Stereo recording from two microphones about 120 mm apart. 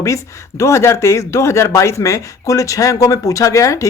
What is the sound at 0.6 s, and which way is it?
Speech, 25° left (ahead or behind).